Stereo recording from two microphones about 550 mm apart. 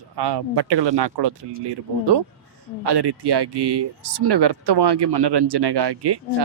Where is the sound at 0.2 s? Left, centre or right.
Right.